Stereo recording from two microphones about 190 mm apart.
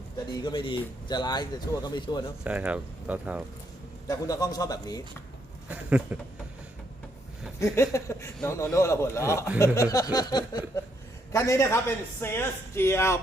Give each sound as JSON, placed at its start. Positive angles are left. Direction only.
{"t": 0.4, "sound": "speech", "side_deg": 25}
{"t": 2.4, "sound": "speech", "side_deg": -5}
{"t": 4.1, "sound": "speech", "side_deg": 20}
{"t": 5.7, "sound": "speech", "side_deg": -10}
{"t": 7.6, "sound": "a man's voice", "side_deg": 15}